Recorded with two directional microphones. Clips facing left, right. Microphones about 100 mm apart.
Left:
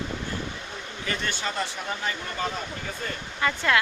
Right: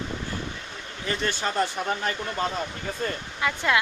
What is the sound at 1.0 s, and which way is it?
Speech, 35° right (ahead or behind).